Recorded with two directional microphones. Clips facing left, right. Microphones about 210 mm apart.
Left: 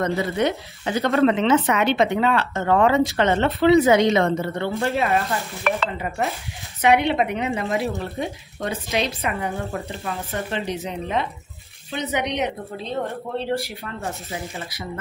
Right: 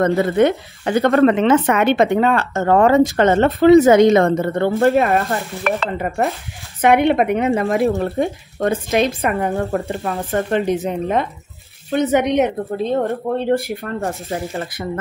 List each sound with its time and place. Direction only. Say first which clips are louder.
0.2 s speech: right 7 dB; 50° right (ahead or behind)